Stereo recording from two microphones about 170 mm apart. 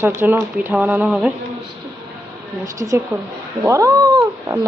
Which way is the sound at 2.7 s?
20° right (ahead or behind).